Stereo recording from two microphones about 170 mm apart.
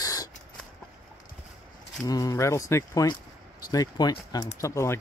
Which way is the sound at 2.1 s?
20° left (ahead or behind).